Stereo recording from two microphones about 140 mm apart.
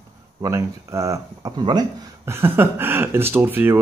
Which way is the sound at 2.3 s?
15° right (ahead or behind).